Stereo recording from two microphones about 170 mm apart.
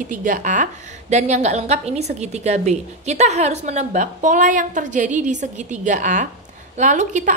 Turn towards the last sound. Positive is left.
turn(degrees=-45)  # may be behind; listen again after turning